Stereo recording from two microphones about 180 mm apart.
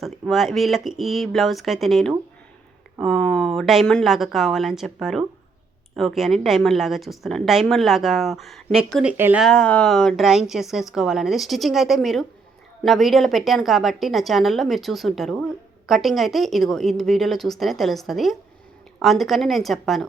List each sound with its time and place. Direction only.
0.0 s a woman's voice: centre (ahead or behind)
9.4 s a woman's voice: 5° left (ahead or behind)